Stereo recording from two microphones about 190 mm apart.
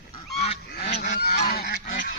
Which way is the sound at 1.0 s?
55° left (ahead or behind).